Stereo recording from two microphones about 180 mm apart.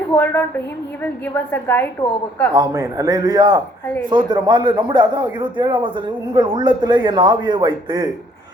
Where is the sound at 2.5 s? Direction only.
20° right (ahead or behind).